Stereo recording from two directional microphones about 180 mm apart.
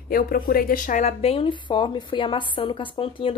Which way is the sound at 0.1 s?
55° left (ahead or behind).